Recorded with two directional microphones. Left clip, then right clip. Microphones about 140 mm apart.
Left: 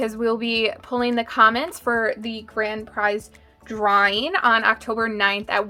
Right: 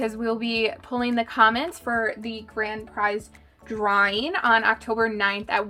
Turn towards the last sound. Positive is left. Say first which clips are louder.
# left 3 dB
turn(degrees=35)  # may be behind; listen again after turning